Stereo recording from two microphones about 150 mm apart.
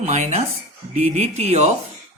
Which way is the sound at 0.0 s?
50° right (ahead or behind).